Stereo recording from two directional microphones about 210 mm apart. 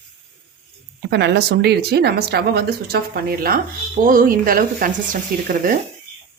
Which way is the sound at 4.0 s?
40° right (ahead or behind).